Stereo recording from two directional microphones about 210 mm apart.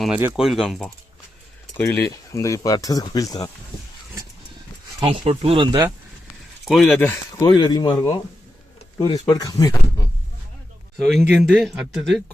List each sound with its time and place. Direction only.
0.0 s speech: 10° right (ahead or behind); by 3.5 s 15° left (ahead or behind)
4.9 s speech: 25° right (ahead or behind)
6.7 s speech: centre (ahead or behind)
7.4 s speech: 20° left (ahead or behind)
10.9 s speech: centre (ahead or behind)